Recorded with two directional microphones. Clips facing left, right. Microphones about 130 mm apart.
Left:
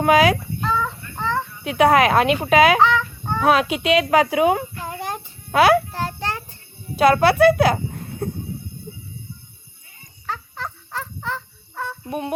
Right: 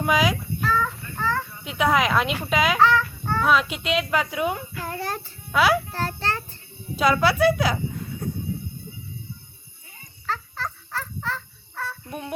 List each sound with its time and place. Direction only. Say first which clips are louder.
0.0 s speech: left 7 dB; 65° left (ahead or behind)
1.1 s a sound: left 2 dB; 20° left (ahead or behind)
1.6 s speech: left 7 dB; 60° left (ahead or behind)
2.8 s fowl: left 1 dB; 20° left (ahead or behind)
3.4 s speech: left 5 dB; 70° left (ahead or behind); by 4.6 s 90° left
4.8 s child singing: left 1 dB; 20° left (ahead or behind)
5.5 s a child's voice: left 5 dB; 60° left (ahead or behind)
5.9 s a sound: left 1 dB; 15° left (ahead or behind)
6.9 s speech: left 5 dB; 60° left (ahead or behind)
10.2 s dog: even; 15° left (ahead or behind)